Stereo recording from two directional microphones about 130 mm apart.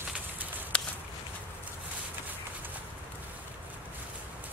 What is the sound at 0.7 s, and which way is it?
Walk, 10° left (ahead or behind).